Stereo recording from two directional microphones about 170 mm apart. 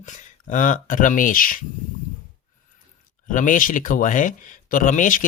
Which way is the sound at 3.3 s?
50° left (ahead or behind).